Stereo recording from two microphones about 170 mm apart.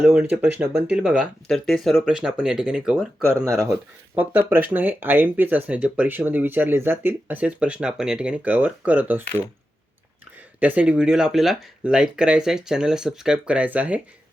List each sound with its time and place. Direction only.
0.0 s speech: 10° right (ahead or behind)
3.4 s speech: 15° right (ahead or behind)
10.6 s speech: 10° right (ahead or behind)